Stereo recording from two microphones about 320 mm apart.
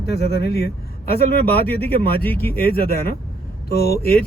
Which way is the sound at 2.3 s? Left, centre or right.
Centre.